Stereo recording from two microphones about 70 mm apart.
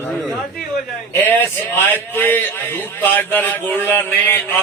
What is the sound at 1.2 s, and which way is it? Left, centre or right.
A man's voice, left.